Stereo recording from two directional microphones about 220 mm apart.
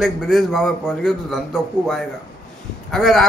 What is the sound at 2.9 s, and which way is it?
Speech, centre (ahead or behind).